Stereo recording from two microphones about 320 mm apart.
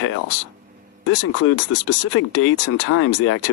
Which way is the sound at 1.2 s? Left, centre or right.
Left.